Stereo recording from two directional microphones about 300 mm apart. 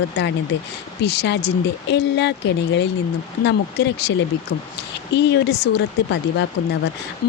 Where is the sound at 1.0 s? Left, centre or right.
Left.